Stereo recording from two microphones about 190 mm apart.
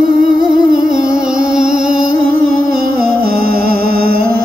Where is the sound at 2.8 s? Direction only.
50° right (ahead or behind).